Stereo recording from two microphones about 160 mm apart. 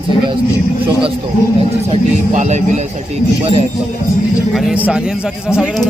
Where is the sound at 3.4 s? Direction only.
35° right (ahead or behind).